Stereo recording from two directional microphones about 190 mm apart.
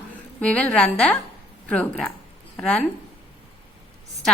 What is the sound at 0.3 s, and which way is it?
A woman's voice, 5° left (ahead or behind).